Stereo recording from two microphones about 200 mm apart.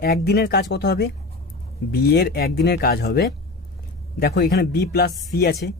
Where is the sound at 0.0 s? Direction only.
50° left (ahead or behind).